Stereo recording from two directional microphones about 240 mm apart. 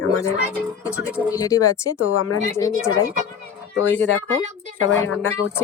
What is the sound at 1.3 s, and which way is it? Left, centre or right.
Speech, centre.